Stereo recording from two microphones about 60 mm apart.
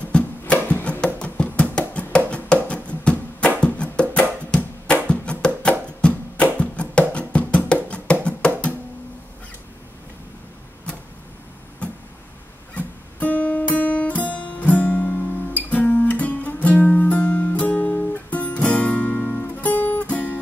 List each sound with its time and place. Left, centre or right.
0.1 s music: centre
0.6 s a sound: left
1.0 s music: centre
12.7 s guitar: left
19.4 s music: left